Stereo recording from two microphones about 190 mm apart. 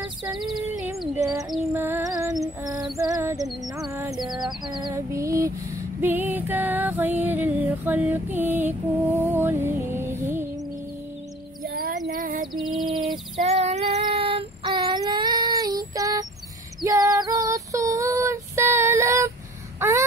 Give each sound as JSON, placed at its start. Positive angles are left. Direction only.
{"t": 0.4, "sound": "a sound", "side_deg": 0}
{"t": 1.7, "sound": "female singing", "side_deg": -15}
{"t": 3.9, "sound": "music", "side_deg": -15}
{"t": 4.6, "sound": "female singing", "side_deg": -25}
{"t": 5.9, "sound": "music", "side_deg": -10}
{"t": 11.6, "sound": "music", "side_deg": -50}
{"t": 12.1, "sound": "a sound", "side_deg": -50}
{"t": 12.6, "sound": "a sound", "side_deg": -25}
{"t": 12.9, "sound": "a sound", "side_deg": 0}
{"t": 13.4, "sound": "child singing", "side_deg": -35}
{"t": 16.8, "sound": "female singing", "side_deg": -15}
{"t": 19.8, "sound": "wail", "side_deg": -15}